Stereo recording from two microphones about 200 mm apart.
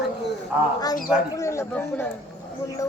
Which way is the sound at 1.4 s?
15° left (ahead or behind).